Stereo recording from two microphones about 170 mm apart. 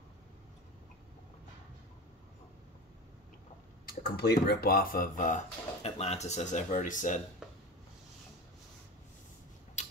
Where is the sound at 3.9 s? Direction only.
65° left (ahead or behind).